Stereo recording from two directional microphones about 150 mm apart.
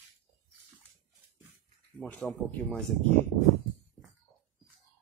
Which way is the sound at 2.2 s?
Centre (ahead or behind).